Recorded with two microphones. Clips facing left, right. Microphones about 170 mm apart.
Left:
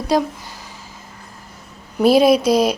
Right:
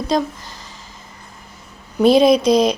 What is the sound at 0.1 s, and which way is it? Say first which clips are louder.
Speech: left 1 dB; 10° left (ahead or behind).